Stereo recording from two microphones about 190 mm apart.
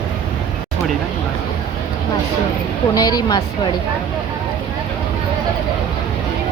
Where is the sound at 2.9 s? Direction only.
20° left (ahead or behind).